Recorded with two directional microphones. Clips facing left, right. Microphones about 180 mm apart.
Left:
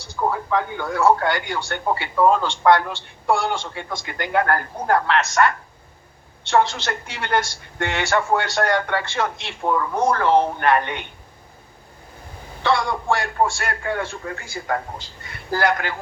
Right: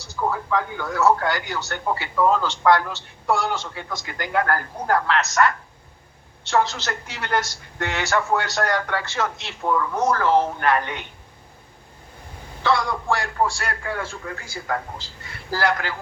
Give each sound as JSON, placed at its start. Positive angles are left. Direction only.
{"t": 0.2, "sound": "speech", "side_deg": 25}
{"t": 12.6, "sound": "speech", "side_deg": 25}